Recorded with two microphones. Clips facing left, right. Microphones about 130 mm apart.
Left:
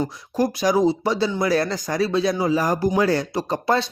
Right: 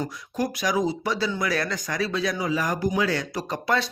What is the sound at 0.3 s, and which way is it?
Speech, 30° left (ahead or behind).